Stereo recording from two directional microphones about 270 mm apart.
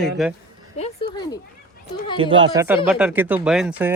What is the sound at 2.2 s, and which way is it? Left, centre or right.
Speech, centre.